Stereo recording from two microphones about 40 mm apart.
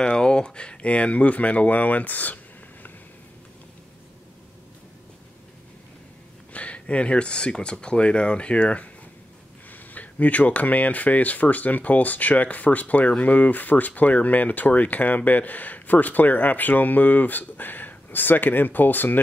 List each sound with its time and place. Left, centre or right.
0.0 s speech: left
6.5 s speech: left
9.7 s speech: left